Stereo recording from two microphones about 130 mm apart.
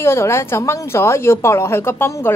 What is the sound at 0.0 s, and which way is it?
A woman's voice, 20° left (ahead or behind).